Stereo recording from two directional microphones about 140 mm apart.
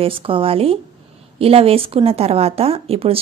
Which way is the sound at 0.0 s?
40° right (ahead or behind).